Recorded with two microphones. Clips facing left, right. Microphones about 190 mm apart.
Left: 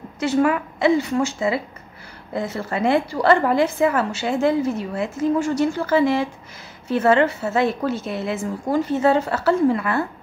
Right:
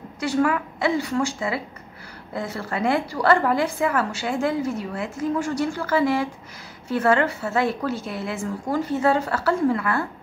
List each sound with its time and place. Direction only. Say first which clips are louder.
0.2 s a woman's voice: left 3 dB; 20° left (ahead or behind)